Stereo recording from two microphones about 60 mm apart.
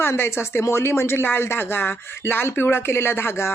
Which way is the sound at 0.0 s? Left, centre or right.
Left.